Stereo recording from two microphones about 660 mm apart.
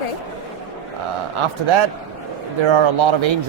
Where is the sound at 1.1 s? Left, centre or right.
Right.